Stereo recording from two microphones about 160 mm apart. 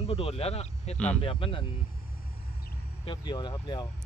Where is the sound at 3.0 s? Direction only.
30° left (ahead or behind).